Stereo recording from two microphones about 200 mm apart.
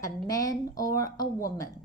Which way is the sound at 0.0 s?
15° left (ahead or behind).